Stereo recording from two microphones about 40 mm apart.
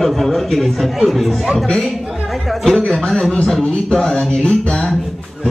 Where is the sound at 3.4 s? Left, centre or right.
Centre.